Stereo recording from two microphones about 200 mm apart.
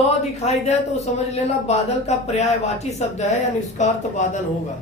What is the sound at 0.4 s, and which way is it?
Speech, 35° left (ahead or behind).